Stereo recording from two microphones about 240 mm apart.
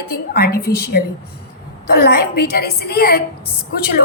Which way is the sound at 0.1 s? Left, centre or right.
Left.